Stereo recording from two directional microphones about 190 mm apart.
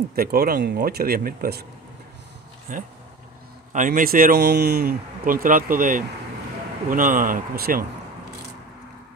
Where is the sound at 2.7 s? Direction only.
45° right (ahead or behind).